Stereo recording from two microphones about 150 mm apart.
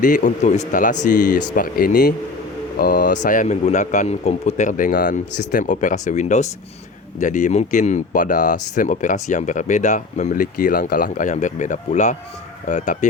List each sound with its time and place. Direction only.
0.0 s speech: 60° left (ahead or behind)
2.7 s speech: 80° left; by 13.1 s 55° left (ahead or behind)